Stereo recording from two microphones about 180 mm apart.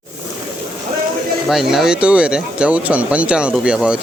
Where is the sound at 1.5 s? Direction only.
Centre (ahead or behind).